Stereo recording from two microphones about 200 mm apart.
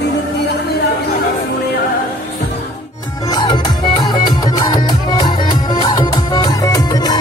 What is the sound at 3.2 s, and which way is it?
Music, 20° left (ahead or behind).